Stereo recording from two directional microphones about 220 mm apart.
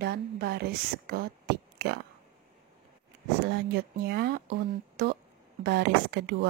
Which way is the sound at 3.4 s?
45° right (ahead or behind).